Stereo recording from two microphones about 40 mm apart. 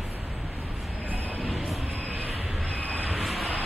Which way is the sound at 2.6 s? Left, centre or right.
Left.